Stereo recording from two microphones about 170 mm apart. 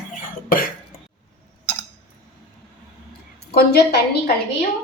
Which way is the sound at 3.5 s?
70° left (ahead or behind).